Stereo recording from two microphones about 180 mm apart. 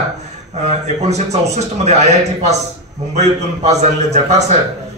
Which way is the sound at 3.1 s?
40° right (ahead or behind).